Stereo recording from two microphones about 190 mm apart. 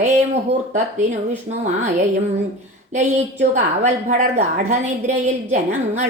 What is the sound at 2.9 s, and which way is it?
A woman's voice, 40° right (ahead or behind).